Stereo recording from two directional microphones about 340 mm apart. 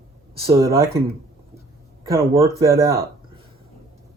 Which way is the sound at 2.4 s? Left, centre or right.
Centre.